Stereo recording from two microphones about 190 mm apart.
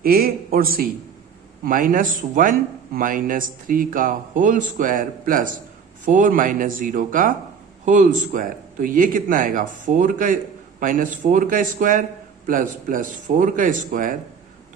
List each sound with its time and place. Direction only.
0.0 s a man's voice: 50° right (ahead or behind)